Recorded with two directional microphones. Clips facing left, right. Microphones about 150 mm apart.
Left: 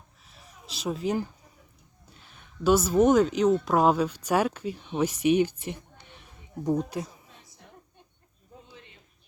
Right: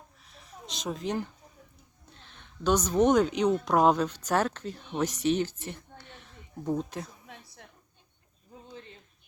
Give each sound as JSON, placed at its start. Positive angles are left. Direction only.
{"t": 0.3, "sound": "a sound", "side_deg": 5}
{"t": 2.0, "sound": "speech", "side_deg": 5}
{"t": 7.3, "sound": "basketball bounce", "side_deg": -75}